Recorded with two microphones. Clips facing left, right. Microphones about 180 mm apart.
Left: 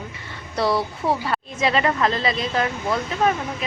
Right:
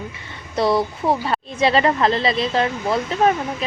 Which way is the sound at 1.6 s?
35° right (ahead or behind).